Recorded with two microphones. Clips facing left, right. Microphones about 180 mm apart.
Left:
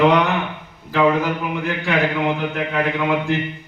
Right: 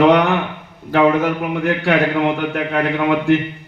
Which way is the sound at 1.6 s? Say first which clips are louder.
Right 5 dB; 60° right (ahead or behind).